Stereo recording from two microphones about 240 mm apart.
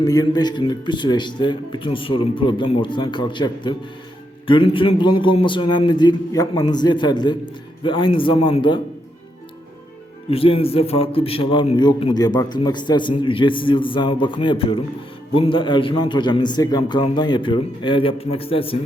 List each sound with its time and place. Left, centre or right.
0.0 s a man's voice: centre
10.2 s a man's voice: left